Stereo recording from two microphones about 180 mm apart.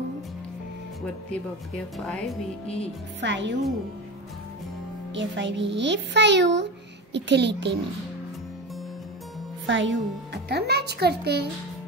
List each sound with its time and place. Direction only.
2.0 s speech: centre (ahead or behind)
2.6 s speech: 35° left (ahead or behind)
3.2 s a child's voice: 80° right
5.1 s a child's voice: 85° right
9.7 s speech: 90° right; by 11.4 s 65° right (ahead or behind)